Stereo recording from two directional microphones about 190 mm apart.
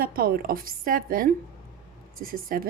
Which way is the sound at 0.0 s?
50° right (ahead or behind).